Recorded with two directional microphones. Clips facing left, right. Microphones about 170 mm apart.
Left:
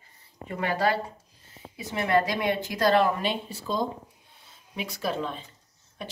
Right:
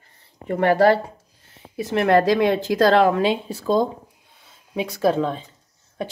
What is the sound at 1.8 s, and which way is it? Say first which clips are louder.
A woman's voice: right 7 dB; 75° right (ahead or behind).